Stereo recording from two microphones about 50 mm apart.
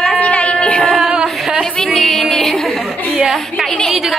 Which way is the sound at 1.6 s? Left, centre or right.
Centre.